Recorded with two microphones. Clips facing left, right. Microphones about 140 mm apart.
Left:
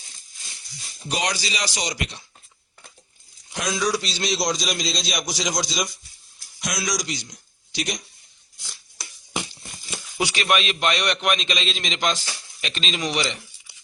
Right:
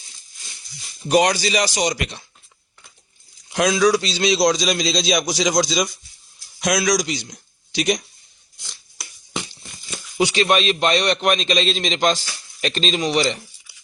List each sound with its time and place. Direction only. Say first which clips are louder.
1.0 s a man's voice: right 10 dB; 55° right (ahead or behind)
3.5 s a man's voice: right 8 dB; 90° right
10.2 s a man's voice: right 5 dB; 25° right (ahead or behind)